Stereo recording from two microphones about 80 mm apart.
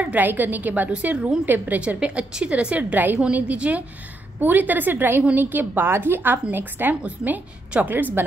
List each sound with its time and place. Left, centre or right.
0.0 s a woman's voice: right